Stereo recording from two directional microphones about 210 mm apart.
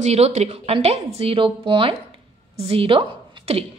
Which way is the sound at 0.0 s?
30° right (ahead or behind).